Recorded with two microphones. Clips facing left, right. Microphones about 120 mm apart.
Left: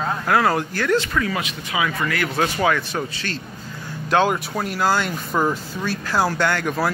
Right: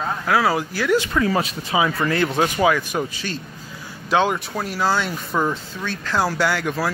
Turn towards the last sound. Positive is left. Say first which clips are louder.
# left 1 dB
turn(degrees=0)  # may be behind; listen again after turning